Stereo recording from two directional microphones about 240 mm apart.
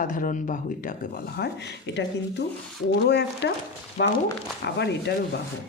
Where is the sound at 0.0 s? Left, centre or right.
Left.